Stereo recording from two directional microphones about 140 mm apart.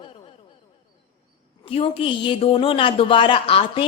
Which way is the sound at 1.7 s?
40° left (ahead or behind).